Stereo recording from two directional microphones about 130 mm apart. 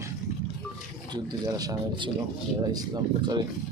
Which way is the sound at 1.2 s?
30° right (ahead or behind).